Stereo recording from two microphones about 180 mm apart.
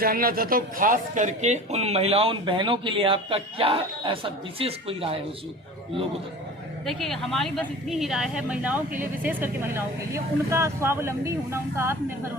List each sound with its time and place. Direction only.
0.0 s speech: 55° right (ahead or behind); by 5.1 s 30° right (ahead or behind)
6.8 s a woman's voice: centre (ahead or behind); by 12.3 s 15° right (ahead or behind)